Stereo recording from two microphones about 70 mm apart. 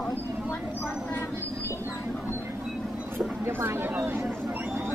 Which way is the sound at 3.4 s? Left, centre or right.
Right.